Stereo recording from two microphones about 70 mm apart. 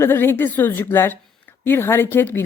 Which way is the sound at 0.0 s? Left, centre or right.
Left.